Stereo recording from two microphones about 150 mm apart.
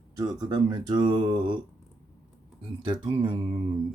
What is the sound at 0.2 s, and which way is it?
Speech, 25° right (ahead or behind).